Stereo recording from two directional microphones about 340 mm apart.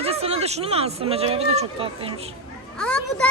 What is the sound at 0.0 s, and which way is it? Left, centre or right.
Speech, centre.